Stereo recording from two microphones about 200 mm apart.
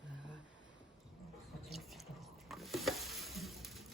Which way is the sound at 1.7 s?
Centre (ahead or behind).